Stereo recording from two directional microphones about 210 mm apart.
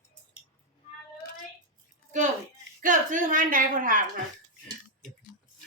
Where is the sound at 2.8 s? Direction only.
40° right (ahead or behind).